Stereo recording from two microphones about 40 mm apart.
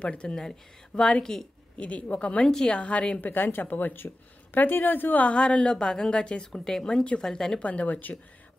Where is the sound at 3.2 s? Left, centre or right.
Left.